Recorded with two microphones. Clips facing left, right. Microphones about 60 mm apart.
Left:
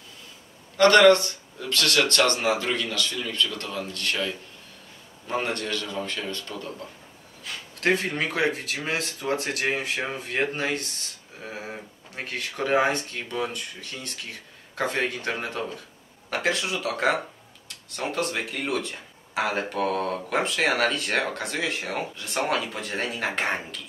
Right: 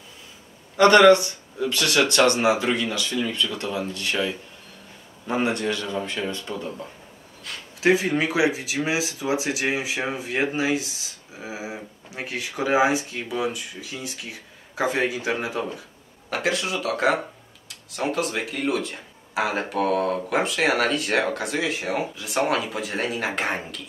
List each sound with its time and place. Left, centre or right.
0.7 s a man's voice: centre
7.4 s speech: centre